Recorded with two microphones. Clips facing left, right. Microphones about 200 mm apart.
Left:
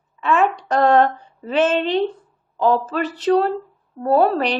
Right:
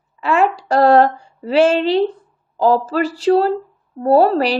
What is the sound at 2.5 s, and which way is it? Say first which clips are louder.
Speech: right 3 dB; 35° right (ahead or behind).